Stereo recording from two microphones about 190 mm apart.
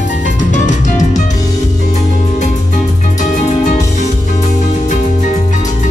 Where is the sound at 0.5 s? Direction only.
40° left (ahead or behind).